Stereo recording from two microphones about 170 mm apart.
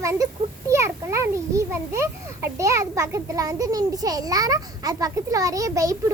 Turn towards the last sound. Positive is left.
turn(degrees=-20)  # may be behind; listen again after turning